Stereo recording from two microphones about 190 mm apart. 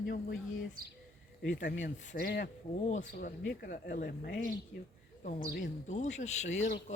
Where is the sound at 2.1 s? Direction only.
55° left (ahead or behind).